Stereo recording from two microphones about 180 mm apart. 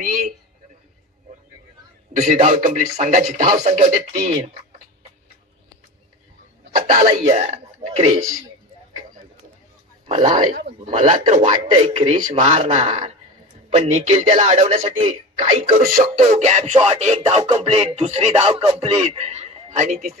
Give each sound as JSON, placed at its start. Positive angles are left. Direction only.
{"t": 2.1, "sound": "speech", "side_deg": -45}
{"t": 7.2, "sound": "speech", "side_deg": -40}
{"t": 10.0, "sound": "speech", "side_deg": -40}
{"t": 15.8, "sound": "a man's voice", "side_deg": -50}